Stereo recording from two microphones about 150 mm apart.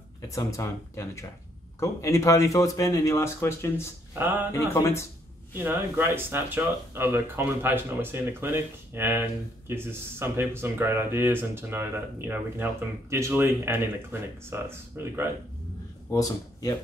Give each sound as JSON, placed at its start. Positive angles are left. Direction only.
{"t": 0.3, "sound": "speech", "side_deg": 20}
{"t": 5.6, "sound": "speech", "side_deg": -15}
{"t": 16.1, "sound": "speech", "side_deg": 25}